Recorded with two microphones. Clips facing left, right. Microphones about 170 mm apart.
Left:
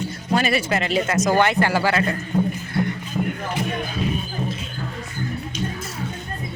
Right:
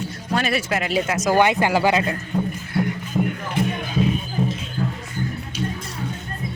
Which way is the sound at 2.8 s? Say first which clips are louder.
Right 1 dB; 5° right (ahead or behind).